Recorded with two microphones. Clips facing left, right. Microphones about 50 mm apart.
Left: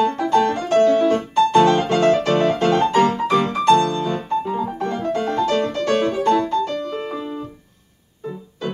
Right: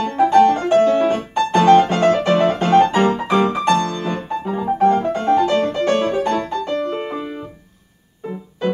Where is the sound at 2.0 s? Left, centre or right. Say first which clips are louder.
Right 1 dB; right.